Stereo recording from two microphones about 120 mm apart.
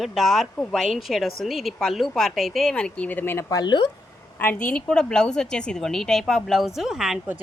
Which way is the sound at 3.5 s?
40° left (ahead or behind).